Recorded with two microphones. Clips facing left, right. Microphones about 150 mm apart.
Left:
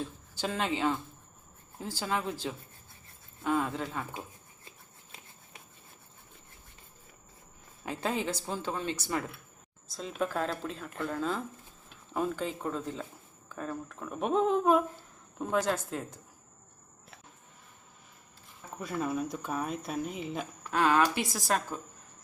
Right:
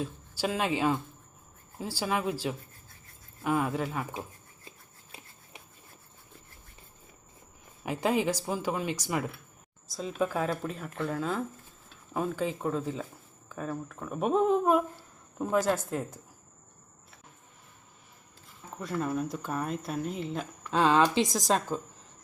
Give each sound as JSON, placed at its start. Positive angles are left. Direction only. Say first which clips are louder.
{"t": 0.0, "sound": "speech", "louder": "right 3 dB", "side_deg": -10}
{"t": 7.9, "sound": "speech", "louder": "right 5 dB", "side_deg": -15}
{"t": 18.8, "sound": "speech", "louder": "right 1 dB", "side_deg": 5}
{"t": 20.7, "sound": "speech", "louder": "right 2 dB", "side_deg": -20}